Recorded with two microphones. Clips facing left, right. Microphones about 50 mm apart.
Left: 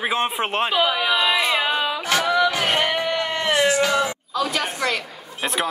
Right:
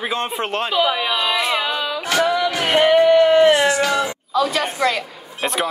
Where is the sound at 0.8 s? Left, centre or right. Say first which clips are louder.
Even; centre.